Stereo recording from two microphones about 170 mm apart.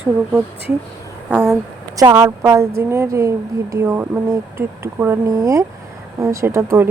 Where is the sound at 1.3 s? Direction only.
10° right (ahead or behind).